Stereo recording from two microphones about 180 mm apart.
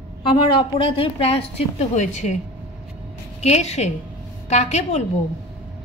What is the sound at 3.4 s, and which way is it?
A woman's voice, 35° left (ahead or behind).